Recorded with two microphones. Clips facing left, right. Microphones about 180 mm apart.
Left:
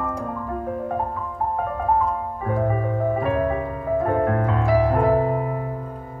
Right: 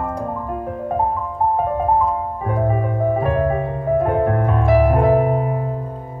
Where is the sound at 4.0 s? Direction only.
20° right (ahead or behind).